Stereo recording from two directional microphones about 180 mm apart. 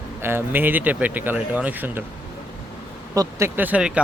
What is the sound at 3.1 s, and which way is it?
Speech, 10° right (ahead or behind).